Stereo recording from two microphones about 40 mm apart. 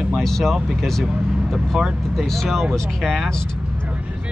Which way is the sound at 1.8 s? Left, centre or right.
Centre.